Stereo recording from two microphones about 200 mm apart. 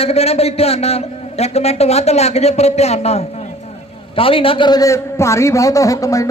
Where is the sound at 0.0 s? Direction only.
30° left (ahead or behind).